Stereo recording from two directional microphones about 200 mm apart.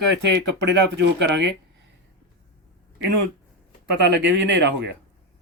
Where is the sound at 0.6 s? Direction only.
60° right (ahead or behind).